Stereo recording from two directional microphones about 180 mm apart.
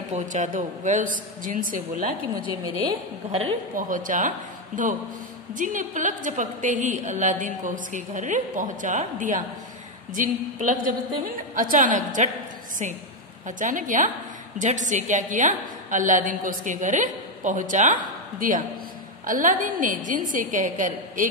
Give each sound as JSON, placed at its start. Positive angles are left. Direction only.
{"t": 0.1, "sound": "a woman's voice", "side_deg": -45}
{"t": 3.3, "sound": "a woman's voice", "side_deg": -35}
{"t": 3.7, "sound": "a woman's voice", "side_deg": -50}
{"t": 13.5, "sound": "a woman's voice", "side_deg": -45}